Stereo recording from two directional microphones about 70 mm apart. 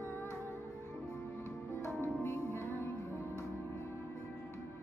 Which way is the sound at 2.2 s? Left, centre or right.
Left.